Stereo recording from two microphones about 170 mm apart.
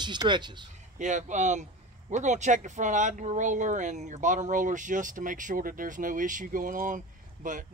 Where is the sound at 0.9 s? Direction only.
45° right (ahead or behind).